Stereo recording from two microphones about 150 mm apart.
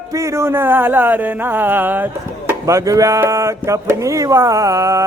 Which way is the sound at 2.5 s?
20° right (ahead or behind).